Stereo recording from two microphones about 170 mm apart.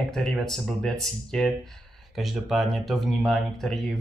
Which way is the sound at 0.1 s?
Centre (ahead or behind).